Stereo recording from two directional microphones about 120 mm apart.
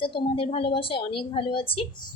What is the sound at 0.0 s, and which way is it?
A woman's voice, 50° left (ahead or behind).